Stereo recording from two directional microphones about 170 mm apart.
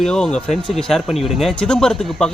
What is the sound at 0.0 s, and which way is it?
Speech, 5° left (ahead or behind).